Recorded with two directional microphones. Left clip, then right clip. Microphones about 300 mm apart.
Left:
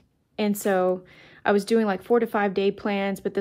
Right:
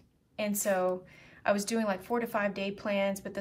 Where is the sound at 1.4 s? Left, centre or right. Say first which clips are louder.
Left 8 dB; left.